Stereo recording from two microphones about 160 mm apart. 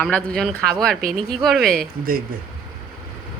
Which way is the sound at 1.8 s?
65° right (ahead or behind).